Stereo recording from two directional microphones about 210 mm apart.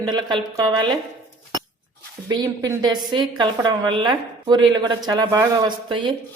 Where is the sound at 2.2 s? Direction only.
15° right (ahead or behind).